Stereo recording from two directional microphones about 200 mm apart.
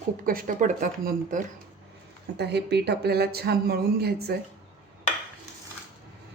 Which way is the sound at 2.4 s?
55° right (ahead or behind).